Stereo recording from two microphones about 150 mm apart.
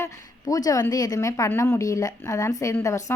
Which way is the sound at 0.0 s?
20° left (ahead or behind).